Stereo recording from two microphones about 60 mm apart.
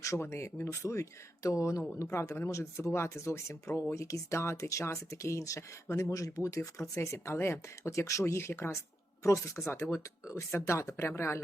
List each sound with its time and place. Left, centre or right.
0.2 s speech: left
8.2 s speech: left
9.2 s speech: left